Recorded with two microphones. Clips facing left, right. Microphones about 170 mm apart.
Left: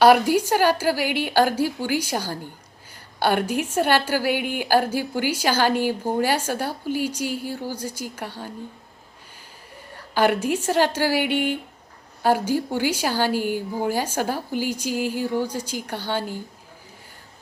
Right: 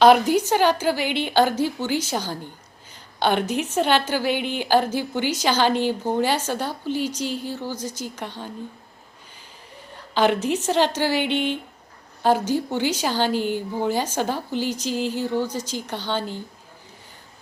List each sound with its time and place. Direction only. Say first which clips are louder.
0.0 s a woman's voice: even; 10° left (ahead or behind)
10.2 s a woman's voice: even; 10° left (ahead or behind)